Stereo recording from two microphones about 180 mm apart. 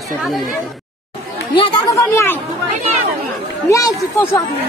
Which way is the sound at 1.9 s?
15° left (ahead or behind).